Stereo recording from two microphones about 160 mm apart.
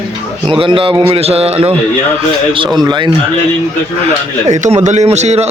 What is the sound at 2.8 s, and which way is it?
Speech, 30° right (ahead or behind).